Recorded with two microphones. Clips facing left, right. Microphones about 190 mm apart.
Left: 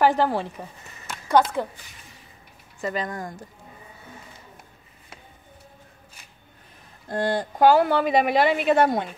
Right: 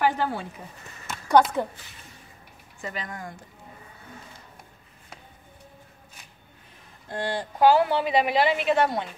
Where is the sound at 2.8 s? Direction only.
40° left (ahead or behind).